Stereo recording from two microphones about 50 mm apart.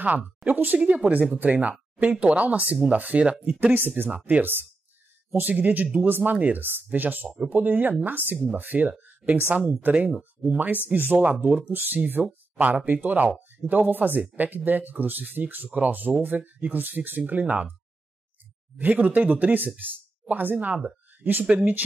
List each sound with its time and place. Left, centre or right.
0.7 s speech: right
7.2 s speech: right
18.8 s speech: right